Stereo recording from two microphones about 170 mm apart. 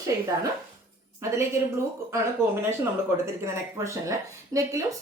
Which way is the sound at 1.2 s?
20° right (ahead or behind).